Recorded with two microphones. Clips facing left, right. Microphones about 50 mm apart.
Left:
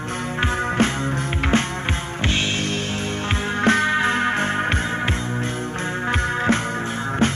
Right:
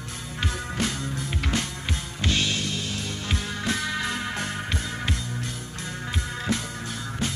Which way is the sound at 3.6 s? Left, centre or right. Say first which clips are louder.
Left 12 dB; left.